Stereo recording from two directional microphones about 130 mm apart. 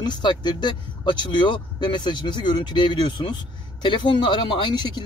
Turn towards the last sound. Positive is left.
turn(degrees=35)  # may be behind; listen again after turning